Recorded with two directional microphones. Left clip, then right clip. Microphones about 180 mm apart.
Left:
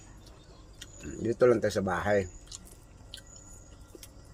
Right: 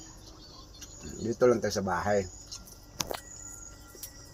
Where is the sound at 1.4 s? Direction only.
40° left (ahead or behind).